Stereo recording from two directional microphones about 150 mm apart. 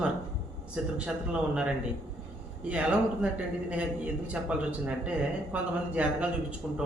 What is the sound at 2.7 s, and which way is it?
Speech, 5° right (ahead or behind).